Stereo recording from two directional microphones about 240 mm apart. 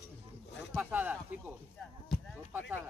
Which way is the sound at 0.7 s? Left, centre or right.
Centre.